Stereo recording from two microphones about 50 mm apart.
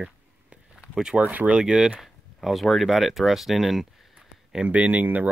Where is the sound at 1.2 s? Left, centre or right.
Right.